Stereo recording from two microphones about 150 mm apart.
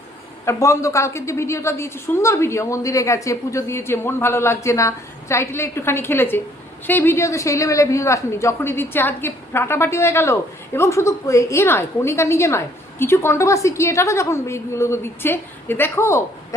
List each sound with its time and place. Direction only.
0.4 s a woman's voice: 20° left (ahead or behind)